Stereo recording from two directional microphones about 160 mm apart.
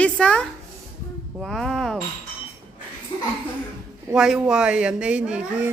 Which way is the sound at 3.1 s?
30° left (ahead or behind).